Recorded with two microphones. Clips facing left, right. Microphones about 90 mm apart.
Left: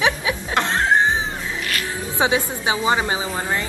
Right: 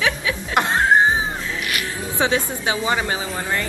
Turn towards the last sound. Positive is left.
turn(degrees=20)  # may be behind; listen again after turning